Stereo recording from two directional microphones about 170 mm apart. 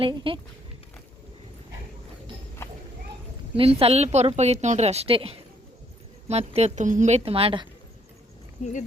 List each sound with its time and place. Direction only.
0.0 s a woman's voice: 30° right (ahead or behind)
3.6 s a woman's voice: 35° right (ahead or behind)